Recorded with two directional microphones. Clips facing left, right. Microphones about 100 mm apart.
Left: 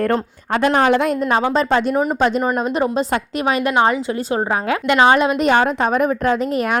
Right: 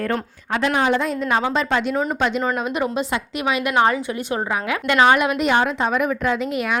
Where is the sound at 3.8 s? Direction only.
25° left (ahead or behind).